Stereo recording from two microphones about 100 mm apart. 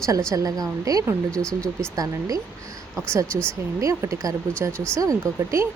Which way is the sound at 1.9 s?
35° right (ahead or behind).